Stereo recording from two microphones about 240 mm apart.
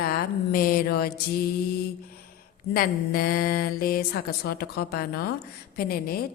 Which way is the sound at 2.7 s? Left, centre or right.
Left.